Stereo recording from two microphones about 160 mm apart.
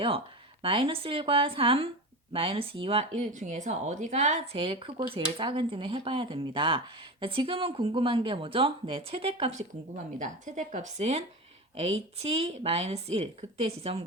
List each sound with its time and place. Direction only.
0.6 s speech: 35° right (ahead or behind)
4.5 s speech: 30° right (ahead or behind)
9.9 s speech: 50° right (ahead or behind)